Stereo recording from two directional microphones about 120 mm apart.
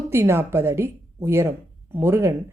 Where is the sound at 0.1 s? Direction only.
20° right (ahead or behind).